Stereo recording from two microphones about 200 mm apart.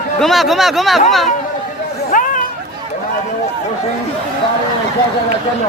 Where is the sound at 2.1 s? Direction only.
40° left (ahead or behind).